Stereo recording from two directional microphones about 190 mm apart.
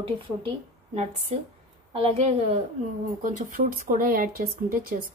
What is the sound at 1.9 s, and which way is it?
Speech, 30° right (ahead or behind).